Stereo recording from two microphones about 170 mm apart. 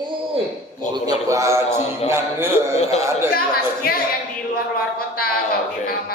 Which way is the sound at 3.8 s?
60° left (ahead or behind).